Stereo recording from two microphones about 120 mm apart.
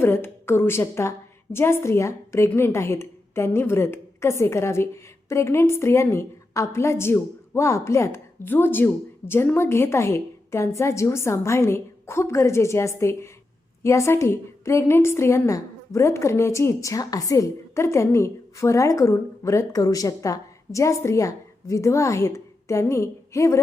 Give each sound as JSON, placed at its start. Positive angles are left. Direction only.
{"t": 0.0, "sound": "a woman's voice", "side_deg": 20}